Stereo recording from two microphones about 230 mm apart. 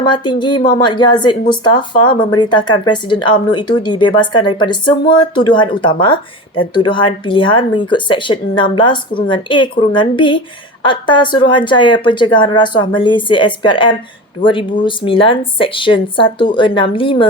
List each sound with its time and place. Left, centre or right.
0.0 s speech: centre